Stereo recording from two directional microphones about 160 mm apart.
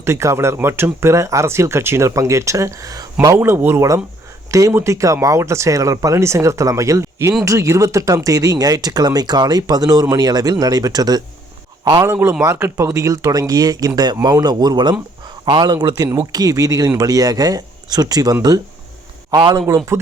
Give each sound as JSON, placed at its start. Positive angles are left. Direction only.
{"t": 0.0, "sound": "speech", "side_deg": -20}
{"t": 11.9, "sound": "speech", "side_deg": -15}